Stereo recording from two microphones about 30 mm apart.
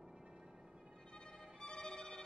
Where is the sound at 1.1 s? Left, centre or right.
Left.